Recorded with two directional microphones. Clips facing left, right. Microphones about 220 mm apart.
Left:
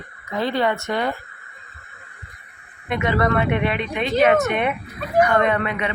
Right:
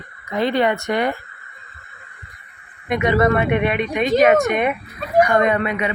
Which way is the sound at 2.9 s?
15° right (ahead or behind).